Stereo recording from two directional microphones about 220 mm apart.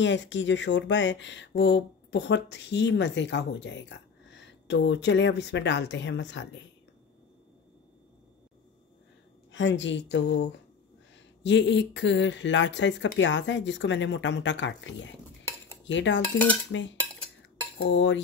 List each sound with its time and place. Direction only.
0.0 s speech: 55° left (ahead or behind)
9.5 s speech: 55° left (ahead or behind)
15.8 s cutlery: 55° left (ahead or behind)
16.7 s speech: 60° left (ahead or behind)